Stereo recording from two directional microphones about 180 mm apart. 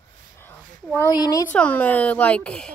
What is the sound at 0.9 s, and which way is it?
Speech, 20° left (ahead or behind).